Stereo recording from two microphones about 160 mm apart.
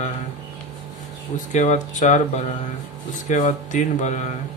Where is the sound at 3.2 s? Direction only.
50° left (ahead or behind).